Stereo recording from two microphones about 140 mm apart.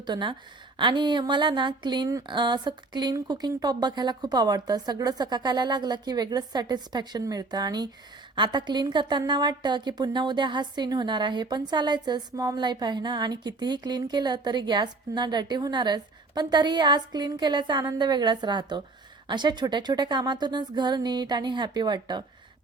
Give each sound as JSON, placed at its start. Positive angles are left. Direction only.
{"t": 0.0, "sound": "a woman's voice", "side_deg": -35}
{"t": 0.8, "sound": "a sound", "side_deg": -35}
{"t": 8.4, "sound": "a woman's voice", "side_deg": -30}